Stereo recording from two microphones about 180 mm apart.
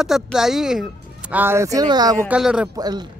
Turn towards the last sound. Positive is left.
turn(degrees=-20)  # may be behind; listen again after turning